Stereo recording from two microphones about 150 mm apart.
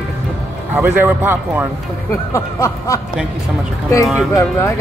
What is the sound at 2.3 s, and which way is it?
Speech, 20° left (ahead or behind).